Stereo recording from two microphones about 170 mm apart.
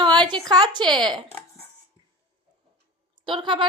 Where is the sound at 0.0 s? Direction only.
30° right (ahead or behind).